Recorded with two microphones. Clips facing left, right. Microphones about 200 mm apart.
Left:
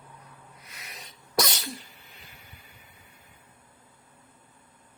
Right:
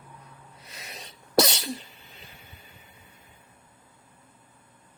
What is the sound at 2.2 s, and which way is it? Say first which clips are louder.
Boat: right 2 dB; 25° right (ahead or behind).